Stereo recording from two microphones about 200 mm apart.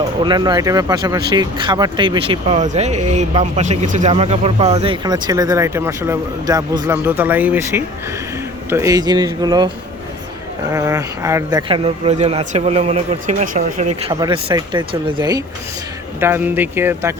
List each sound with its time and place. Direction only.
0.3 s speech: 20° right (ahead or behind)
10.7 s speech: 15° right (ahead or behind)
11.7 s speech: 30° right (ahead or behind)
14.1 s speech: 20° right (ahead or behind)